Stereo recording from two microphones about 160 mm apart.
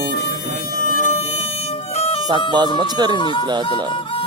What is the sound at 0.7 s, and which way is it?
Music, 60° left (ahead or behind).